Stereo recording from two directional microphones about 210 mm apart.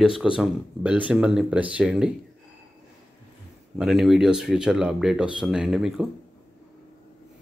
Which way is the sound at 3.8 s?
Centre (ahead or behind).